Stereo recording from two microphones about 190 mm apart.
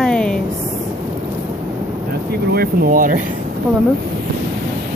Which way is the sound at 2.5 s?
50° right (ahead or behind).